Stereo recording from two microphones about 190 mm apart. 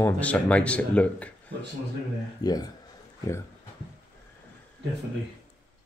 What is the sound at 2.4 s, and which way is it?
Speech, 20° left (ahead or behind).